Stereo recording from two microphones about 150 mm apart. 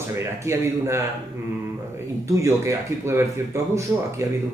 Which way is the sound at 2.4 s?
15° right (ahead or behind).